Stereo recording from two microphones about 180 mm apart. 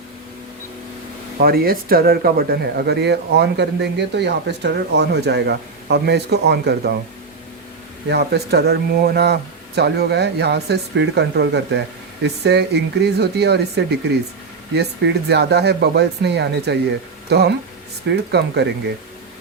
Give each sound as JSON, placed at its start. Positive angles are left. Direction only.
{"t": 1.4, "sound": "speech", "side_deg": -55}
{"t": 8.1, "sound": "speech", "side_deg": -65}